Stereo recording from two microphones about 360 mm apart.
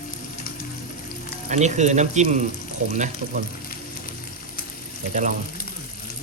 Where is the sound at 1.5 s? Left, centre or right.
Centre.